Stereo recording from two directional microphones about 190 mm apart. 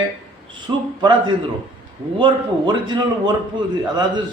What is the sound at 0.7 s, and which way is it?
Speech, 20° right (ahead or behind).